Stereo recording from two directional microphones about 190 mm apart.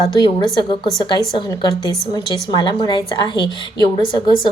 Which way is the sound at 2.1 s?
25° left (ahead or behind).